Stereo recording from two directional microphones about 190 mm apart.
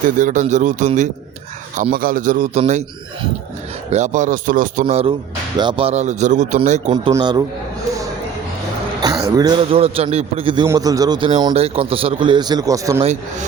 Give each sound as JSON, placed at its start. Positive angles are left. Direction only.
{"t": 0.2, "sound": "a man's voice", "side_deg": -40}
{"t": 3.8, "sound": "speech", "side_deg": -35}
{"t": 6.9, "sound": "a man's voice", "side_deg": -25}
{"t": 9.0, "sound": "a sound", "side_deg": -20}
{"t": 9.7, "sound": "a man's voice", "side_deg": -30}